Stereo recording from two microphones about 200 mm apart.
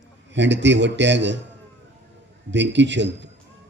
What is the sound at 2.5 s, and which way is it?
Speech, 60° right (ahead or behind).